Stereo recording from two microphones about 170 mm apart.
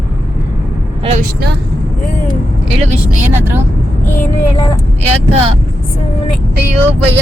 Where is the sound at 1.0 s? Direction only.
40° right (ahead or behind).